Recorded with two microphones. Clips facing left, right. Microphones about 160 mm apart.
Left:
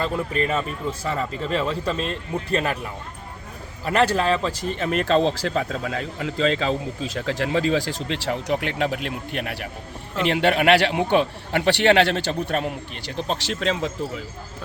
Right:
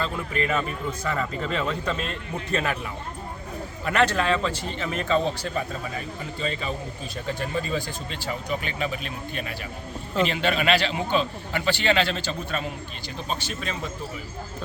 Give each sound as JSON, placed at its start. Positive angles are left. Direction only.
{"t": 0.0, "sound": "speech", "side_deg": 35}
{"t": 4.1, "sound": "speech", "side_deg": 35}
{"t": 4.8, "sound": "a man's voice", "side_deg": 65}
{"t": 13.1, "sound": "speech", "side_deg": 80}